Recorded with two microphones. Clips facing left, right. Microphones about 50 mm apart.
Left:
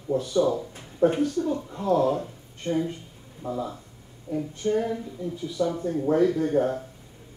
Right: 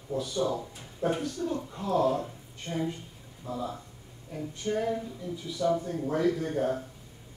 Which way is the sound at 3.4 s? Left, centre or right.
Left.